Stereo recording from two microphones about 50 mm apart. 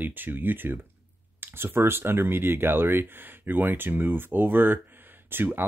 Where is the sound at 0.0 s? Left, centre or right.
Right.